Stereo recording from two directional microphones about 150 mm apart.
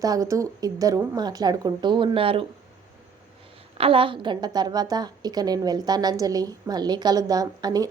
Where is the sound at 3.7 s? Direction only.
40° right (ahead or behind).